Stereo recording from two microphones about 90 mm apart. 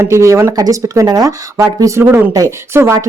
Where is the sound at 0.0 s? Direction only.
35° right (ahead or behind).